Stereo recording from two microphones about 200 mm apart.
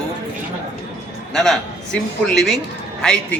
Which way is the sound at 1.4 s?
5° left (ahead or behind).